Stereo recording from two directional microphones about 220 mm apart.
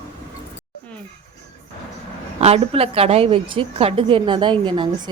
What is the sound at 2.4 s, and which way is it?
A woman's voice, 25° right (ahead or behind).